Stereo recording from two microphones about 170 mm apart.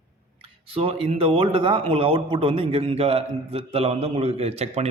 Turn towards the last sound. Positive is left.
turn(degrees=-40)  # may be behind; listen again after turning